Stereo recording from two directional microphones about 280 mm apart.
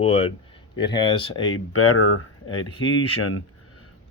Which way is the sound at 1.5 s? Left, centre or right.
Left.